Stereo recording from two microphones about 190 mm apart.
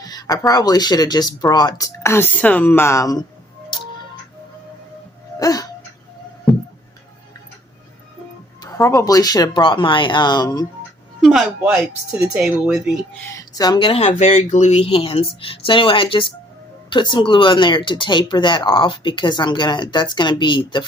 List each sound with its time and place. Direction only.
0.0 s speech: 20° left (ahead or behind)
5.4 s a sound: 20° left (ahead or behind)
8.6 s speech: 15° left (ahead or behind)
11.2 s speech: centre (ahead or behind)
13.1 s speech: 15° left (ahead or behind)